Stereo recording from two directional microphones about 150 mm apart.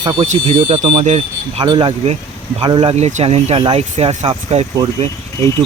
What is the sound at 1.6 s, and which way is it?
Speech, 30° right (ahead or behind).